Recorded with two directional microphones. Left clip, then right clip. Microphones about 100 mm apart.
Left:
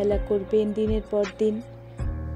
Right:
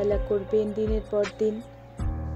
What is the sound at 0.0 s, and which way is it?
Speech, 35° left (ahead or behind).